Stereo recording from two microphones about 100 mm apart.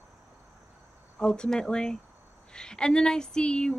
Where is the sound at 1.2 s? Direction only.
10° left (ahead or behind).